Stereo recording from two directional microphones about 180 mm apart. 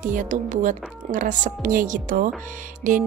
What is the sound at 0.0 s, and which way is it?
Speech, 45° right (ahead or behind).